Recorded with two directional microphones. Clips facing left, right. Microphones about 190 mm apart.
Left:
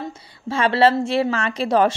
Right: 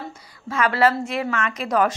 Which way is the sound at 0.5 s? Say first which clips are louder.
Left 3 dB; 30° left (ahead or behind).